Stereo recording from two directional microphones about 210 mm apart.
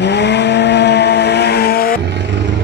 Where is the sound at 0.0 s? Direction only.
55° left (ahead or behind).